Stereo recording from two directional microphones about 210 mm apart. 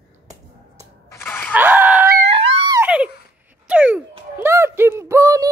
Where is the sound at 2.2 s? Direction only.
25° right (ahead or behind).